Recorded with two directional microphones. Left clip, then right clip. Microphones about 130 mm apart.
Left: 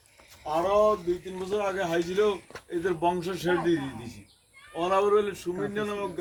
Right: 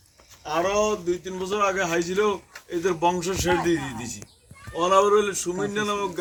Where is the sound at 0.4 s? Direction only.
20° left (ahead or behind).